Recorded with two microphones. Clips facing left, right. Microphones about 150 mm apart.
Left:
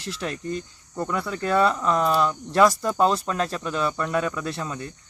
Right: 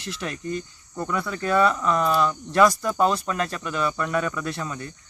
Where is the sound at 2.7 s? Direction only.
30° left (ahead or behind).